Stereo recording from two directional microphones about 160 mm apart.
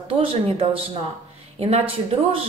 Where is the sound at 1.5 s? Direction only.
40° right (ahead or behind).